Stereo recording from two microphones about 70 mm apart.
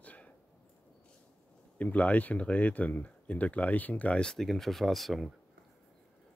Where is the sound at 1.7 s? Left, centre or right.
Left; by 5.4 s centre.